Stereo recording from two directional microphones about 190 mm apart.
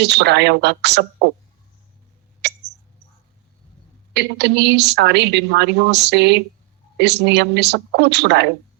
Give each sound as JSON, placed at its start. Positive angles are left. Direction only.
{"t": 0.0, "sound": "a woman's voice", "side_deg": -65}
{"t": 2.4, "sound": "hiccup", "side_deg": -65}
{"t": 4.1, "sound": "a woman's voice", "side_deg": -65}